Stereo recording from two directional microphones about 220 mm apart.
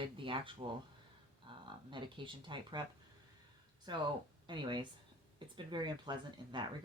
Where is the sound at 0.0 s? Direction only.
25° right (ahead or behind).